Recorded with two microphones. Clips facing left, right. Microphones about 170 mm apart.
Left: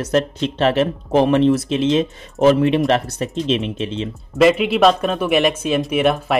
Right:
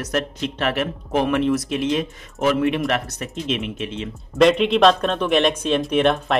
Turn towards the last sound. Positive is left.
turn(degrees=5)  # may be behind; listen again after turning